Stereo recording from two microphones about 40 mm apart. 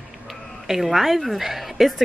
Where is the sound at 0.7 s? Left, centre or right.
Centre.